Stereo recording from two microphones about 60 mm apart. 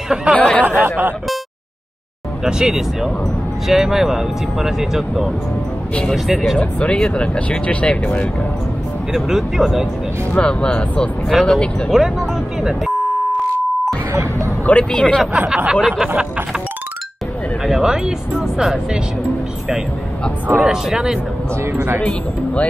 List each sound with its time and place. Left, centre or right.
0.1 s speech: centre
0.4 s speech: left
0.7 s speech: right
2.4 s speech: centre
6.6 s speech: centre
9.1 s speech: centre
10.4 s speech: centre
11.2 s speech: centre
14.6 s speech: left
15.3 s speech: centre
17.6 s speech: centre
20.6 s speech: centre
22.0 s speech: left